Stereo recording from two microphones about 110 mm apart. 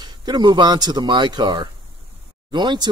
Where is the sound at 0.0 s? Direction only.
40° right (ahead or behind).